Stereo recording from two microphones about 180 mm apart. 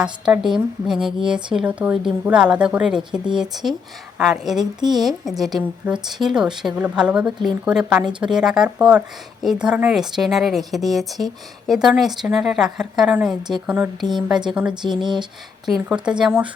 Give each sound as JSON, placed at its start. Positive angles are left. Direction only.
{"t": 0.0, "sound": "a woman's voice", "side_deg": -5}
{"t": 14.8, "sound": "speech", "side_deg": -25}
{"t": 15.6, "sound": "a woman's voice", "side_deg": -5}